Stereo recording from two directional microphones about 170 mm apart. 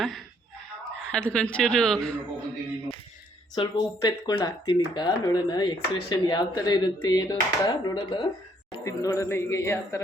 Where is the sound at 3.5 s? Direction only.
25° left (ahead or behind).